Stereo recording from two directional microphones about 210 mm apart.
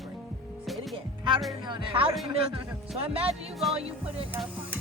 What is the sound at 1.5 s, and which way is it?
Speech, 20° right (ahead or behind).